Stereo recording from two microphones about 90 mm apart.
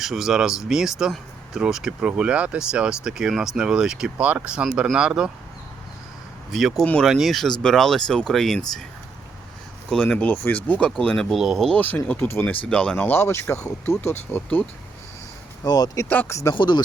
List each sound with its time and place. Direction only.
0.0 s speech: 5° right (ahead or behind)
6.5 s speech: centre (ahead or behind)
9.9 s speech: 15° left (ahead or behind)
11.7 s speech: 20° left (ahead or behind)
12.6 s speech: 10° left (ahead or behind)
13.1 s speech: 30° left (ahead or behind)
15.6 s speech: 45° left (ahead or behind)
16.2 s speech: 35° left (ahead or behind)
16.6 s speech: 55° left (ahead or behind)